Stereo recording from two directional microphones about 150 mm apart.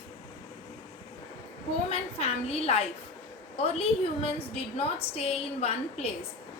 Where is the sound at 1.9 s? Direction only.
45° left (ahead or behind).